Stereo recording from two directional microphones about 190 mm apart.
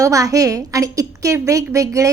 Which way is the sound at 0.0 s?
15° right (ahead or behind).